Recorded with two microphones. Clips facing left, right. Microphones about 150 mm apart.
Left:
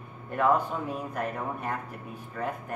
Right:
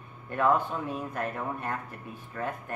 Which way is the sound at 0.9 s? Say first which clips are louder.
Left 1 dB; centre (ahead or behind).